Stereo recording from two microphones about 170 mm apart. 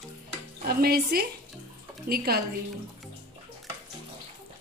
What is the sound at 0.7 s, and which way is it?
A woman's voice, 65° right (ahead or behind).